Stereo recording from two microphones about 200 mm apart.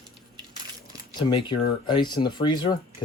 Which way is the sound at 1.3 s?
25° left (ahead or behind).